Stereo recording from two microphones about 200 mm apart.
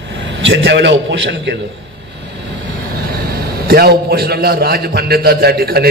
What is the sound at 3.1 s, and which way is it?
A man's voice, 50° right (ahead or behind).